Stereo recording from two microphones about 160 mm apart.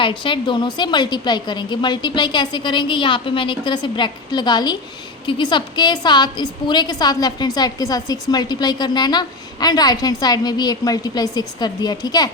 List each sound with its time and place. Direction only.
0.0 s a woman's voice: 30° left (ahead or behind)